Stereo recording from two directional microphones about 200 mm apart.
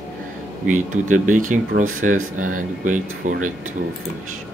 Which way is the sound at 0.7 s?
40° right (ahead or behind).